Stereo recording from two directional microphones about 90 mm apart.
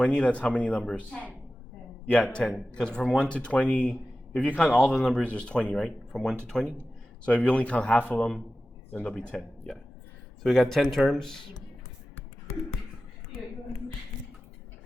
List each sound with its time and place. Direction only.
0.0 s speech: 10° left (ahead or behind)
2.3 s speech: 5° left (ahead or behind)
3.2 s a man's voice: 15° left (ahead or behind)
9.1 s speech: 5° left (ahead or behind)